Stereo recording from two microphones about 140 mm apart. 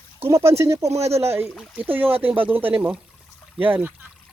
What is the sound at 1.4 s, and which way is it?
Speech, centre (ahead or behind).